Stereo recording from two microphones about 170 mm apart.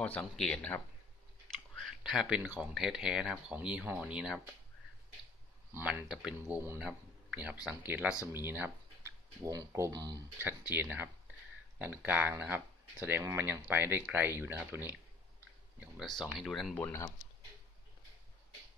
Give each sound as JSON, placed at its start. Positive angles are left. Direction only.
{"t": 0.0, "sound": "speech", "side_deg": 10}
{"t": 5.7, "sound": "speech", "side_deg": -10}
{"t": 6.4, "sound": "speech", "side_deg": -15}
{"t": 6.9, "sound": "a sound", "side_deg": -5}
{"t": 7.6, "sound": "speech", "side_deg": -10}
{"t": 10.4, "sound": "speech", "side_deg": -10}
{"t": 15.8, "sound": "speech", "side_deg": 0}